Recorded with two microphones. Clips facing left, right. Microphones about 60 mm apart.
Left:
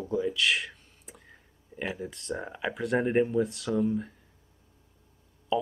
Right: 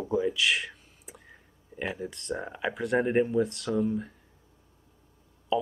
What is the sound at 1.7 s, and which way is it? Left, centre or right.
Speech, centre.